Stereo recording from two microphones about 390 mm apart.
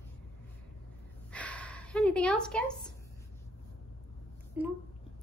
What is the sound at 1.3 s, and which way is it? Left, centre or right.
Speech, centre.